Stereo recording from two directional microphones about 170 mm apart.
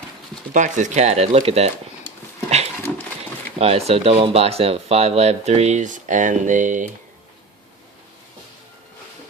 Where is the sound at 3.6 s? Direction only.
35° right (ahead or behind).